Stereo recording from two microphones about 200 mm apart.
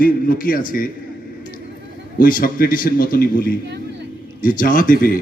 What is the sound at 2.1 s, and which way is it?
A man's voice, 45° left (ahead or behind).